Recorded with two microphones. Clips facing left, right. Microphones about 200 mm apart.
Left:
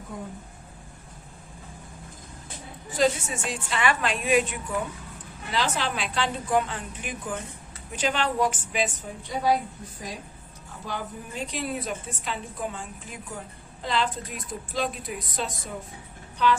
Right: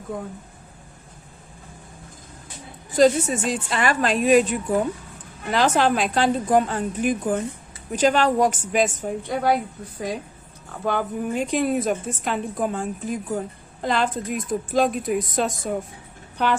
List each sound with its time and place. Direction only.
3.0 s a woman's voice: 40° right (ahead or behind); by 9.6 s 60° right (ahead or behind)
10.8 s a woman's voice: 55° right (ahead or behind)